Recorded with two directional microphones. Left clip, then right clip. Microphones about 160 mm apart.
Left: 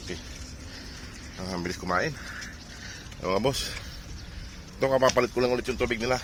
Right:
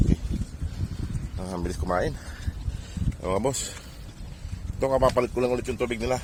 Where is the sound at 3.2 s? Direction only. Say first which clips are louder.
Even; centre (ahead or behind).